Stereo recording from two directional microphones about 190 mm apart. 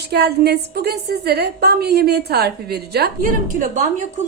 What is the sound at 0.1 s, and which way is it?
A woman's voice, 60° right (ahead or behind).